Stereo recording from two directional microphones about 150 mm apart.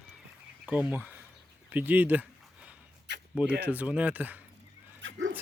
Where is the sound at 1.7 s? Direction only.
10° right (ahead or behind).